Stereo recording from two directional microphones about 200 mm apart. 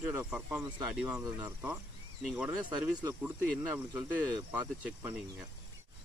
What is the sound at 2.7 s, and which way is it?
Speech, 15° right (ahead or behind).